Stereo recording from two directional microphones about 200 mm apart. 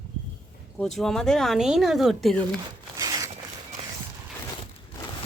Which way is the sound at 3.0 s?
20° right (ahead or behind).